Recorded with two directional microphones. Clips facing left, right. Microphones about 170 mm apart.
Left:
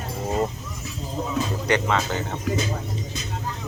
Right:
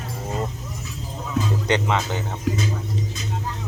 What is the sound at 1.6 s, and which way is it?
Speech, 20° right (ahead or behind).